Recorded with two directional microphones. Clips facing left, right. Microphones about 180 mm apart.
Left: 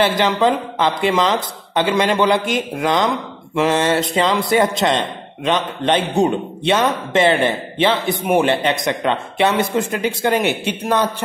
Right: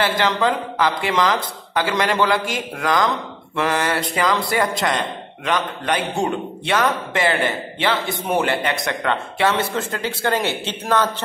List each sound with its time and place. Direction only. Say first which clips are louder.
0.0 s a man's voice: left 4 dB; 20° left (ahead or behind)